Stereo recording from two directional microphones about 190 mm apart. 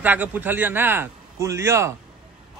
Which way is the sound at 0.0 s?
10° right (ahead or behind).